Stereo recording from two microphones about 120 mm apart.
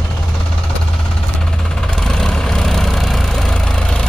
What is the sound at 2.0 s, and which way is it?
Vehicle, 5° left (ahead or behind).